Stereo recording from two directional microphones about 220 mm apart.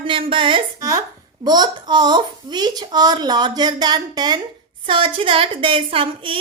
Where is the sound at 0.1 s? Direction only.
25° right (ahead or behind).